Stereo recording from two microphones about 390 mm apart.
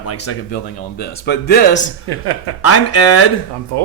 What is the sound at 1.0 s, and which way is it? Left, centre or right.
Speech, left.